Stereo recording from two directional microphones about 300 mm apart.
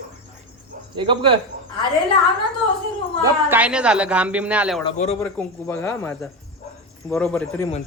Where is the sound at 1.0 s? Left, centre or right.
Centre.